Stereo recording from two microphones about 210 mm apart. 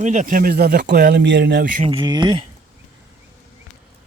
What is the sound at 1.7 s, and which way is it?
Speech, 30° right (ahead or behind).